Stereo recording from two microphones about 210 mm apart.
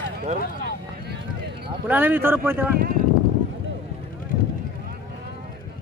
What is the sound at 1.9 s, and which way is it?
Speech, 10° right (ahead or behind).